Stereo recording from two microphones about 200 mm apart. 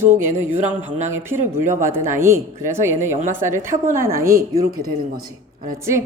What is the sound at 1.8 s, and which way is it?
Speech, 10° right (ahead or behind).